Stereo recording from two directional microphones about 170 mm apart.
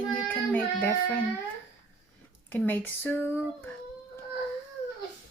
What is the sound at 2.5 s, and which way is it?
Speech, 10° left (ahead or behind).